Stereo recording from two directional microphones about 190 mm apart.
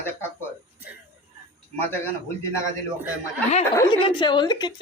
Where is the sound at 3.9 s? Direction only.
25° left (ahead or behind).